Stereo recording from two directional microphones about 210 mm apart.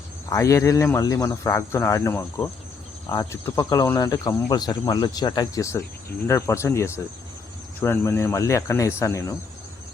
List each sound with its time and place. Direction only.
0.3 s speech: 15° left (ahead or behind)